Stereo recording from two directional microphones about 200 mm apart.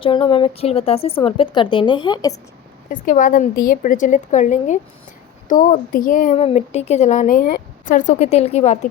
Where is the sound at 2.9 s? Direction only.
40° left (ahead or behind).